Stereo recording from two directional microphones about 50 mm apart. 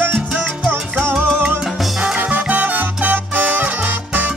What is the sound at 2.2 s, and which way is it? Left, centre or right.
Music, right.